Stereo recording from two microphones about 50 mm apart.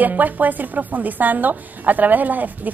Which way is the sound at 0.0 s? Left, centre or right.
Right.